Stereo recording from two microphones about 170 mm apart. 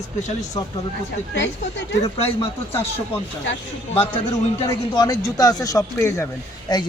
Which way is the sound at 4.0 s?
25° left (ahead or behind).